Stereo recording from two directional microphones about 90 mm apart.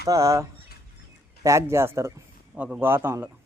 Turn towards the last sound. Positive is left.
turn(degrees=-25)  # may be behind; listen again after turning